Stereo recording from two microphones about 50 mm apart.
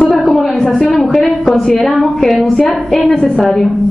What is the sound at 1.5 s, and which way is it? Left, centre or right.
A woman's voice, centre.